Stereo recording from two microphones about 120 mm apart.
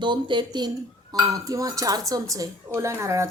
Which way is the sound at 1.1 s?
25° right (ahead or behind).